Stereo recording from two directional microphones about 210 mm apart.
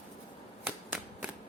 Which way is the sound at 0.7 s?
10° right (ahead or behind).